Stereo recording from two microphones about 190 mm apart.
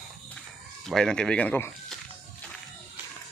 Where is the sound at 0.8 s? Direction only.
Centre (ahead or behind).